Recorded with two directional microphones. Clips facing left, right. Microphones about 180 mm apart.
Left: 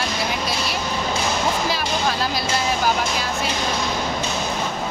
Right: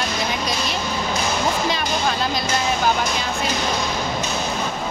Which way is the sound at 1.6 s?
5° left (ahead or behind).